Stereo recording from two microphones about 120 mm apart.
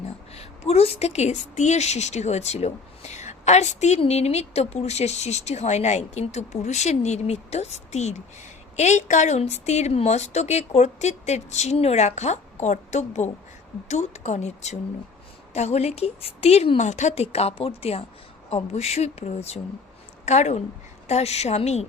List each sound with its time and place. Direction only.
0.0 s a woman's voice: 60° left (ahead or behind)
20.2 s speech: 75° left (ahead or behind)
21.1 s speech: 65° left (ahead or behind)